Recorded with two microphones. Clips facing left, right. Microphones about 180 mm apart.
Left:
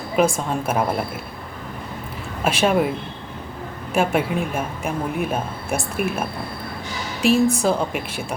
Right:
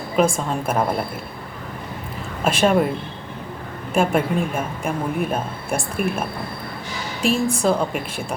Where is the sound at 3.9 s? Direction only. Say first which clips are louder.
Right 1 dB; 5° left (ahead or behind).